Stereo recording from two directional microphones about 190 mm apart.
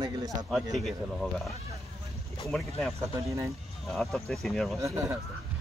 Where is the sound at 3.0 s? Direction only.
15° right (ahead or behind).